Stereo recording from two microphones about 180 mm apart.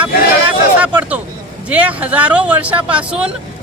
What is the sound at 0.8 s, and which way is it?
Speech, 10° right (ahead or behind).